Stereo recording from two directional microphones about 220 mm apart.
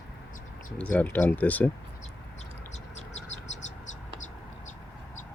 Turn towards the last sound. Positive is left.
turn(degrees=30)  # may be behind; listen again after turning